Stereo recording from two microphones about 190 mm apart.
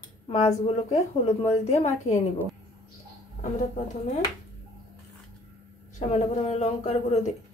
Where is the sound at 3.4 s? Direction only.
40° left (ahead or behind).